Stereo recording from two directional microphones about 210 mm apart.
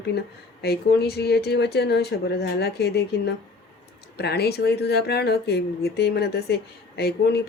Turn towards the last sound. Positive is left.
turn(degrees=50)  # may be behind; listen again after turning